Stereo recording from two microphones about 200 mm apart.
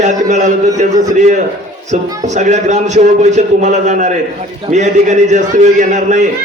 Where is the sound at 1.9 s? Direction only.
35° right (ahead or behind).